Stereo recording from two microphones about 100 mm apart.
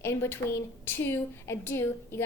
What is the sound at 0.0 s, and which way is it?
A woman's voice, 25° left (ahead or behind).